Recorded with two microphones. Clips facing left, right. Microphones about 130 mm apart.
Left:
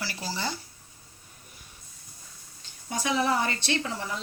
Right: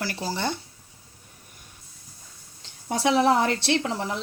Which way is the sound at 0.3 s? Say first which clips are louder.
Right 4 dB; 55° right (ahead or behind).